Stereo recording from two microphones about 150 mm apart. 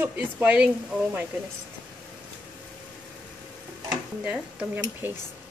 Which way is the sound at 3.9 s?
5° right (ahead or behind).